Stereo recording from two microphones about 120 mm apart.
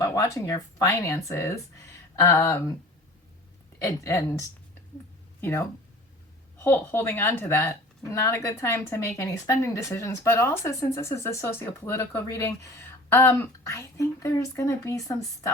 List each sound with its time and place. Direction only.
0.0 s speech: 30° left (ahead or behind)
3.8 s speech: 25° left (ahead or behind)